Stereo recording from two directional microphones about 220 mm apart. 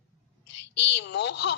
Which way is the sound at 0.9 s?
50° left (ahead or behind).